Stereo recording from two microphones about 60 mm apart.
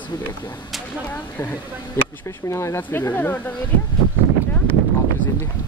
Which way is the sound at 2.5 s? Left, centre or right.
Left.